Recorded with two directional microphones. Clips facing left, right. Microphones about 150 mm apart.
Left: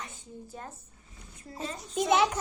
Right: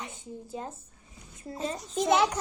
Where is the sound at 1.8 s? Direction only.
Centre (ahead or behind).